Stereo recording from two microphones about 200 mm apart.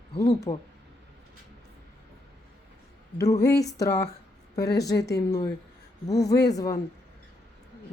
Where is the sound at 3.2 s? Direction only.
15° left (ahead or behind).